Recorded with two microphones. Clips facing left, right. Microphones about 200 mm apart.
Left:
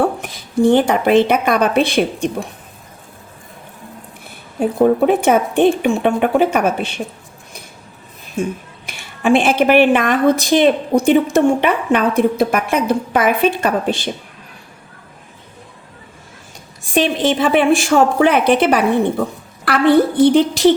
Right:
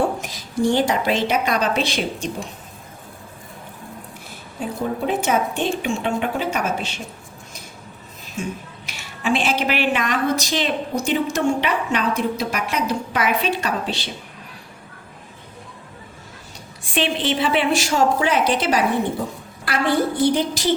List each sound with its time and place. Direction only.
0.0 s a woman's voice: 60° left (ahead or behind)
4.6 s speech: 60° left (ahead or behind)
8.9 s speech: 55° left (ahead or behind)
16.8 s a woman's voice: 45° left (ahead or behind); by 20.7 s 60° left (ahead or behind)